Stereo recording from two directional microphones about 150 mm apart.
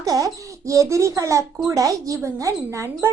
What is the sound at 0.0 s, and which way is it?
A woman's voice, 20° right (ahead or behind).